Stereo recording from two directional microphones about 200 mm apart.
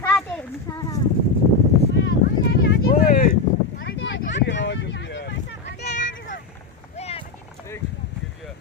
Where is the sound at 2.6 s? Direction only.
55° left (ahead or behind).